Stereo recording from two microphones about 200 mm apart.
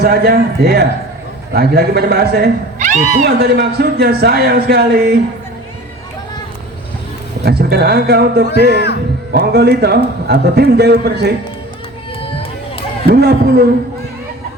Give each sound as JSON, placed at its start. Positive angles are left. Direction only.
{"t": 0.0, "sound": "speech", "side_deg": -50}
{"t": 2.7, "sound": "cat", "side_deg": -35}
{"t": 3.2, "sound": "speech", "side_deg": -55}
{"t": 7.4, "sound": "a man's voice", "side_deg": -55}
{"t": 13.1, "sound": "speech", "side_deg": -55}